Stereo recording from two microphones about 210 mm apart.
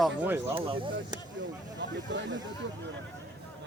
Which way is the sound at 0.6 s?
25° right (ahead or behind).